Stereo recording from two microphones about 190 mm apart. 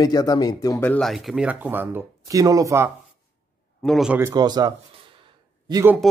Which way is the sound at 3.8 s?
Centre (ahead or behind).